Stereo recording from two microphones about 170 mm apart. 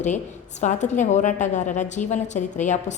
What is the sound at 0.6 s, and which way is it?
A woman's voice, 45° left (ahead or behind).